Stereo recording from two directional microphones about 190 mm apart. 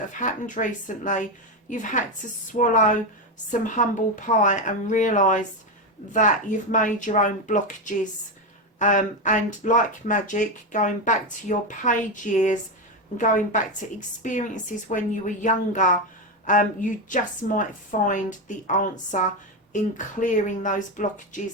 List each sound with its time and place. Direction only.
0.1 s a woman's voice: 40° left (ahead or behind)